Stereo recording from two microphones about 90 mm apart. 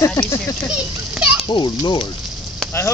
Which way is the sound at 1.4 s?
55° left (ahead or behind).